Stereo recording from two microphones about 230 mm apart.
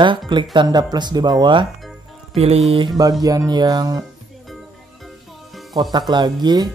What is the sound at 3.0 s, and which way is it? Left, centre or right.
Speech, centre.